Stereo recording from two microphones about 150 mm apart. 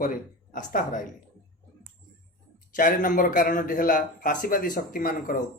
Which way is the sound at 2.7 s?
65° left (ahead or behind).